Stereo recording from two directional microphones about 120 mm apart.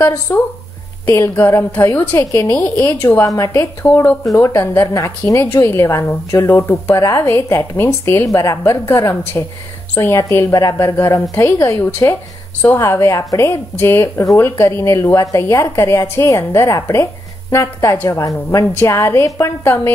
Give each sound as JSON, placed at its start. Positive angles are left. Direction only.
{"t": 0.3, "sound": "a woman's voice", "side_deg": 20}
{"t": 3.0, "sound": "a woman's voice", "side_deg": 20}